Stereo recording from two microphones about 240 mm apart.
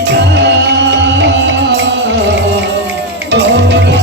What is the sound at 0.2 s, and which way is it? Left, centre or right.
Music, right.